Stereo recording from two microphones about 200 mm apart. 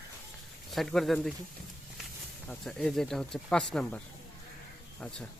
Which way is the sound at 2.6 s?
Centre (ahead or behind).